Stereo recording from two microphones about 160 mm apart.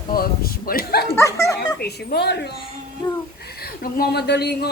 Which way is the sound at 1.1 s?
20° left (ahead or behind).